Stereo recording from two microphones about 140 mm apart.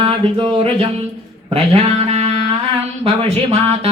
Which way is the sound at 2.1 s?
50° right (ahead or behind).